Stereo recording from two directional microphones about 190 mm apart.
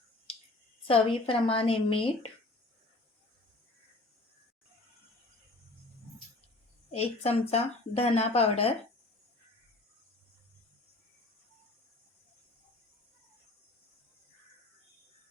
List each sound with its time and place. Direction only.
0.9 s a woman's voice: 30° left (ahead or behind)
6.9 s speech: 35° left (ahead or behind)